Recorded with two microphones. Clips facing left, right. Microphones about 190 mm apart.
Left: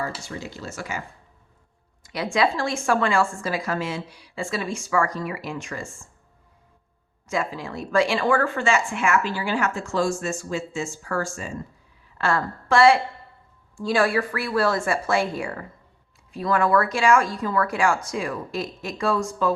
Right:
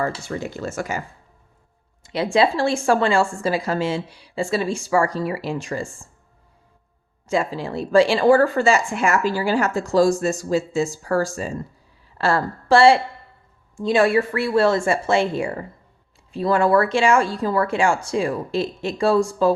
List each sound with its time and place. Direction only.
0.3 s speech: 55° right (ahead or behind)
2.0 s a woman's voice: 25° right (ahead or behind)
7.3 s a woman's voice: 30° right (ahead or behind)